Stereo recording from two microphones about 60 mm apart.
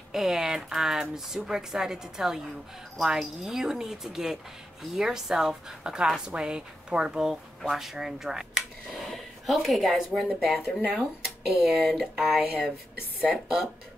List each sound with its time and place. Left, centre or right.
0.1 s a woman's voice: centre
12.4 s a woman's voice: centre